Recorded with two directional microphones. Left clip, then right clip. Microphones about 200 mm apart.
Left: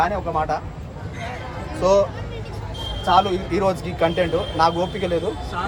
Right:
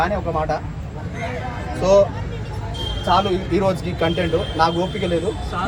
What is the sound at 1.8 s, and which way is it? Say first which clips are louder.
Speech: right 3 dB; 10° left (ahead or behind).